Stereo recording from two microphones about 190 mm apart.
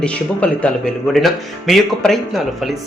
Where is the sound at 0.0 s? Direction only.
5° left (ahead or behind).